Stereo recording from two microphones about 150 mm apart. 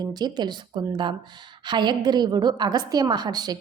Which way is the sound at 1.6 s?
30° right (ahead or behind).